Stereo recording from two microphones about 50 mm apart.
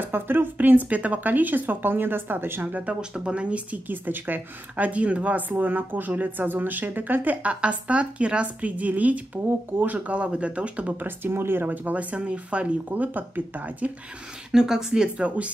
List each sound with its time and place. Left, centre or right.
0.0 s speech: right
2.9 s speech: centre
3.9 s speech: right
11.1 s speech: right
11.6 s speech: right
12.9 s speech: right
14.5 s speech: centre